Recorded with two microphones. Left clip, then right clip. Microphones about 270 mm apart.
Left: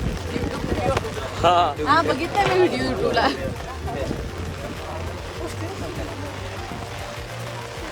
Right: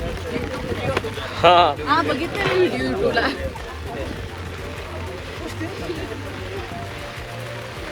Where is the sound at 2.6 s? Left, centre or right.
Left.